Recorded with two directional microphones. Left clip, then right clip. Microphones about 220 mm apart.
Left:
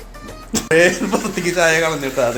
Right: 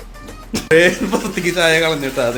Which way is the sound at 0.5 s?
15° right (ahead or behind).